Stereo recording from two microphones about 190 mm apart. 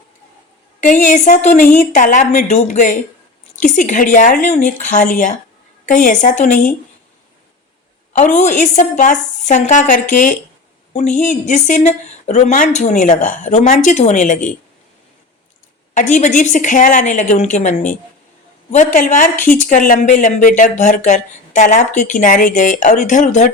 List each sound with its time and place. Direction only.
0.8 s a woman's voice: 40° left (ahead or behind)
8.1 s a woman's voice: 40° left (ahead or behind)
16.0 s a woman's voice: 40° left (ahead or behind)
18.9 s a woman's voice: 40° left (ahead or behind)